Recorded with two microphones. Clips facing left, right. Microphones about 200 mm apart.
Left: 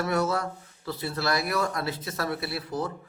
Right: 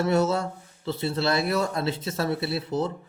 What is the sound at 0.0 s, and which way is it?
Speech, 25° right (ahead or behind).